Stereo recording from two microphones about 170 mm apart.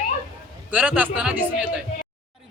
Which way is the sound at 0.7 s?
10° right (ahead or behind).